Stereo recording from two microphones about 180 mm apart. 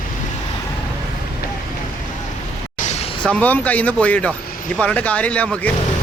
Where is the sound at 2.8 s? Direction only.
40° left (ahead or behind).